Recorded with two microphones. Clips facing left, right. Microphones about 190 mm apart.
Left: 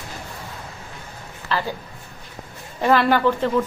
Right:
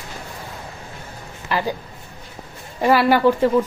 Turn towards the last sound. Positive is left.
turn(degrees=-10)  # may be behind; listen again after turning